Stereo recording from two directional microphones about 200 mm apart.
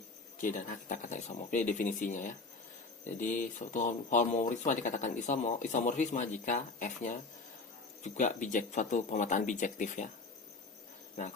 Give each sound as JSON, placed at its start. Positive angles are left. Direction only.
{"t": 0.3, "sound": "speech", "side_deg": 40}